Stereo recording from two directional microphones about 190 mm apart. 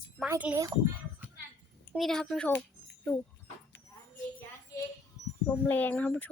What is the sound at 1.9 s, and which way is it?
Speech, 5° left (ahead or behind).